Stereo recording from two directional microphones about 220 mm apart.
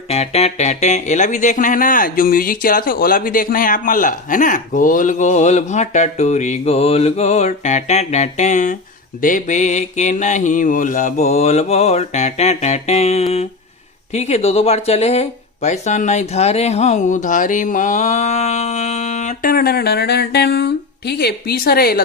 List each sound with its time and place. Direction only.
0.1 s speech: 30° left (ahead or behind); by 22.0 s 45° left (ahead or behind)